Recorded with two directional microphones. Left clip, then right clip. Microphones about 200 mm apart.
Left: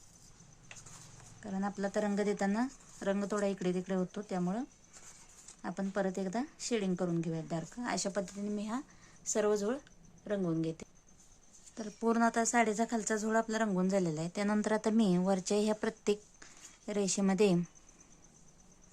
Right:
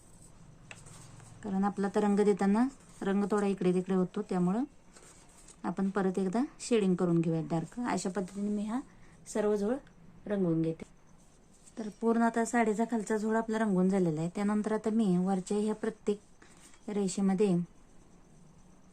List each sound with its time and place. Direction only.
1.4 s speech: centre (ahead or behind)
5.6 s a woman's voice: centre (ahead or behind); by 17.6 s 20° left (ahead or behind)